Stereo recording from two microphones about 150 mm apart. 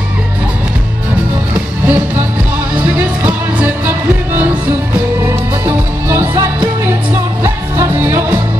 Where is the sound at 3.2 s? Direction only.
10° right (ahead or behind).